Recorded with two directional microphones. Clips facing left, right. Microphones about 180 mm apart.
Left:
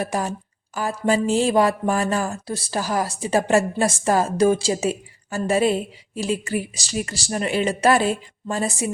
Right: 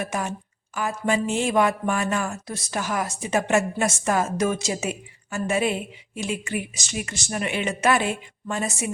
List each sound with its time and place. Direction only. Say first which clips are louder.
0.0 s speech: left 3 dB; 35° left (ahead or behind)